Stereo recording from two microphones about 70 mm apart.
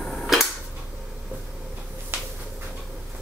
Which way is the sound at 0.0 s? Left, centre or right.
Centre.